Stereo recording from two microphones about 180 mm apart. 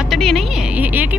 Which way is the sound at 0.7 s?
10° right (ahead or behind).